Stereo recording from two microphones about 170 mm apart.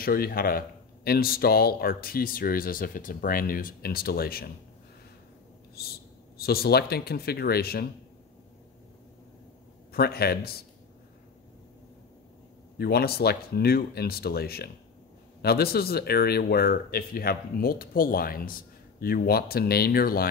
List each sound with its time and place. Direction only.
0.0 s speech: 60° left (ahead or behind)
5.8 s speech: 65° left (ahead or behind)
9.9 s speech: 65° left (ahead or behind)
12.7 s speech: 65° left (ahead or behind)